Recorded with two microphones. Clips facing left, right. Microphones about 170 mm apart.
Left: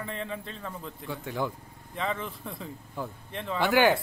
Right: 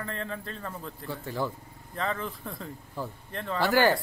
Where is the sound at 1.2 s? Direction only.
15° left (ahead or behind).